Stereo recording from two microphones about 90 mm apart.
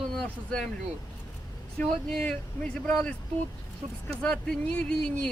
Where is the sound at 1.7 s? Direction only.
10° left (ahead or behind).